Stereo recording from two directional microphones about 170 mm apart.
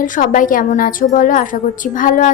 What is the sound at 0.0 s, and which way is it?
Speech, 50° left (ahead or behind).